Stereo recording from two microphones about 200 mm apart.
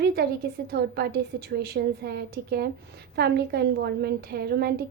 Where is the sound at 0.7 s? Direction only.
50° right (ahead or behind).